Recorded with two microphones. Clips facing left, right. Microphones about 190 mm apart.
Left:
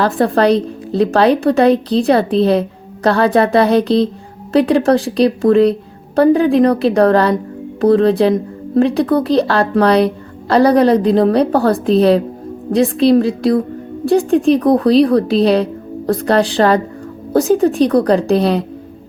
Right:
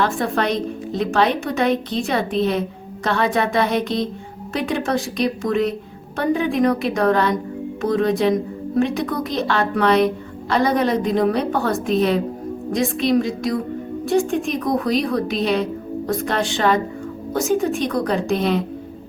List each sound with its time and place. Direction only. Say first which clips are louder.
0.0 s a woman's voice: left 8 dB; 35° left (ahead or behind)